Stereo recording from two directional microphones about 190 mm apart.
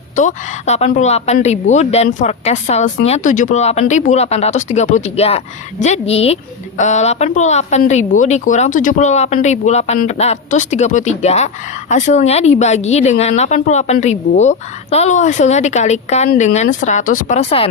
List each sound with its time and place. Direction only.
0.2 s a woman's voice: 40° left (ahead or behind)